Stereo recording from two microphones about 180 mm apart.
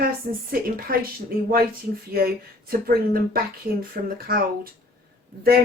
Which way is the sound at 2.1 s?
55° right (ahead or behind).